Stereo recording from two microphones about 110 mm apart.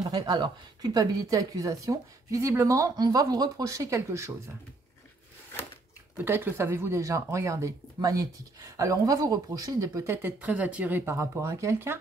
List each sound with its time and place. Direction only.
0.0 s speech: 35° right (ahead or behind)
6.1 s speech: 20° right (ahead or behind)
10.1 s speech: 15° right (ahead or behind)